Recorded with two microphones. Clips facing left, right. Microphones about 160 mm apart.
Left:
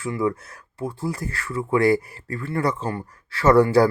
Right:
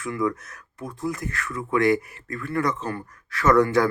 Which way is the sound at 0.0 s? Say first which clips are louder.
Left 2 dB; 30° left (ahead or behind).